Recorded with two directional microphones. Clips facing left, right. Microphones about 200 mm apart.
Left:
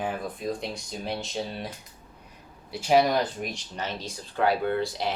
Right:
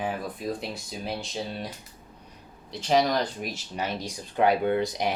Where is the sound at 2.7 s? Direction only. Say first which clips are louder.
Left 2 dB; 10° left (ahead or behind).